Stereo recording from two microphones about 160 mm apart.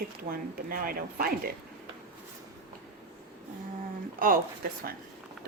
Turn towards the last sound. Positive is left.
turn(degrees=-65)  # may be behind; listen again after turning